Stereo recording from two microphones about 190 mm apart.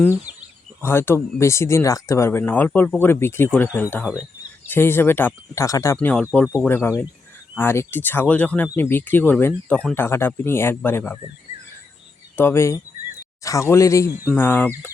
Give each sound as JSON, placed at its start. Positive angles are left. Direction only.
{"t": 0.8, "sound": "speech", "side_deg": 10}
{"t": 12.4, "sound": "speech", "side_deg": 15}